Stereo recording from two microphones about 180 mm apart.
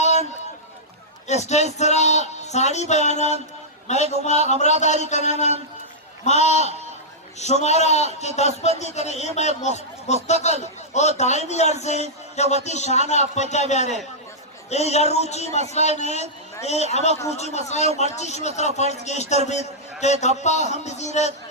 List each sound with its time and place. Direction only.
0.0 s run: 40° left (ahead or behind)
1.5 s a man's voice: 40° left (ahead or behind)